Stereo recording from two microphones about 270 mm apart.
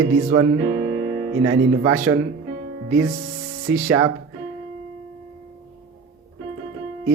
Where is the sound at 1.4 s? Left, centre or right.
Right.